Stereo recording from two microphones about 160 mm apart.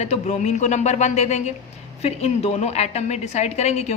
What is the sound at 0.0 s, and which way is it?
A woman's voice, 45° left (ahead or behind).